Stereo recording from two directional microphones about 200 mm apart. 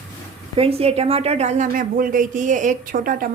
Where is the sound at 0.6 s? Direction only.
30° right (ahead or behind).